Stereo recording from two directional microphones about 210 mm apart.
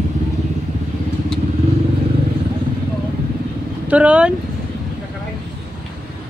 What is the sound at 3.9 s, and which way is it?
Speech, 5° right (ahead or behind).